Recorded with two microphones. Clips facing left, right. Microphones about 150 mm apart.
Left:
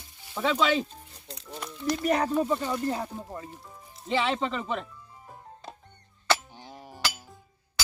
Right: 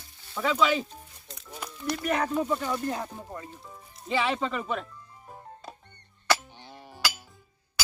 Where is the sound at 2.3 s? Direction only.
5° left (ahead or behind).